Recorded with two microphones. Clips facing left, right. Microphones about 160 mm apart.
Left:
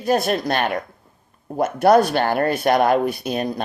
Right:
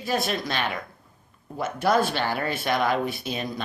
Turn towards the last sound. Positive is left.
turn(degrees=55)  # may be behind; listen again after turning